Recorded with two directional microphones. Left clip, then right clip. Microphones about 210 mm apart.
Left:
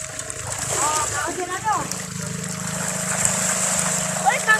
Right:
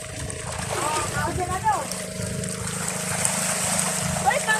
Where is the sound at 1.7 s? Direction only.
40° left (ahead or behind).